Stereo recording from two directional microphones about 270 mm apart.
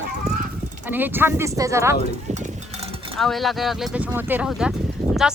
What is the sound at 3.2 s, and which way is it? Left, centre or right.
Speech, centre.